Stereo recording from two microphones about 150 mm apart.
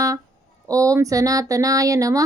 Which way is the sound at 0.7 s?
20° right (ahead or behind).